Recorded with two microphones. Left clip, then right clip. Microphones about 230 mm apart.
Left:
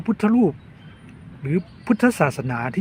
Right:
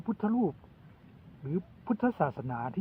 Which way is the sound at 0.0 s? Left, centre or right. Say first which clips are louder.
Left 11 dB; centre.